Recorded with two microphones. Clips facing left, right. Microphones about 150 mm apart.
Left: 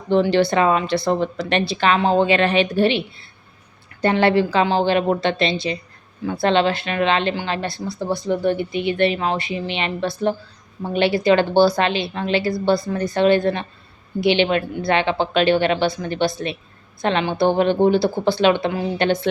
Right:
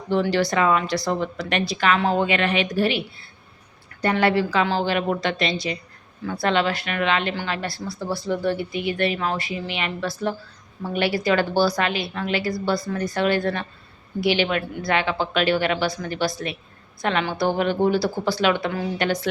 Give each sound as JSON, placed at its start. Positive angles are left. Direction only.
{"t": 0.1, "sound": "a woman's voice", "side_deg": 25}
{"t": 4.0, "sound": "a woman's voice", "side_deg": 25}